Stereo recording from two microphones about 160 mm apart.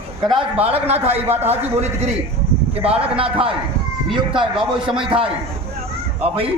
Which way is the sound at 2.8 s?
40° right (ahead or behind).